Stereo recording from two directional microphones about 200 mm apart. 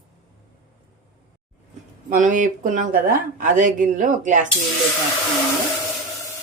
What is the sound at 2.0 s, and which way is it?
Speech, 40° right (ahead or behind).